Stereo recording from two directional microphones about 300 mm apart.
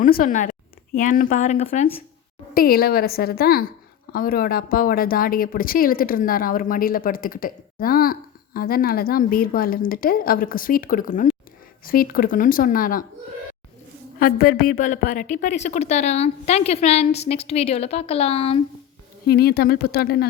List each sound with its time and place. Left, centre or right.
0.0 s a woman's voice: left
14.2 s a woman's voice: left
19.3 s a woman's voice: left